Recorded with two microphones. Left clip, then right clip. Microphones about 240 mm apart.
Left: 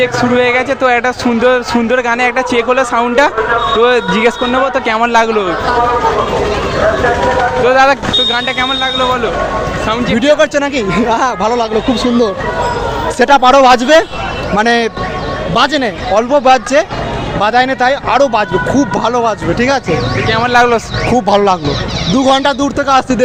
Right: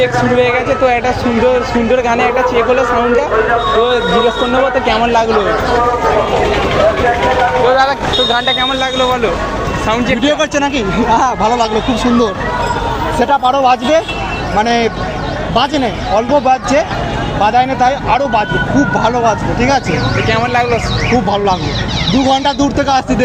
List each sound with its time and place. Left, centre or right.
0.0 s speech: left
4.5 s speech: left
7.7 s speech: left
8.3 s speech: centre
10.2 s speech: left
13.1 s speech: left
21.2 s speech: left